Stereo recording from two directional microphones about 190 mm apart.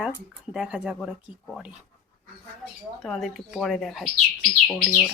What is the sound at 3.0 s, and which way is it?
Speech, centre (ahead or behind).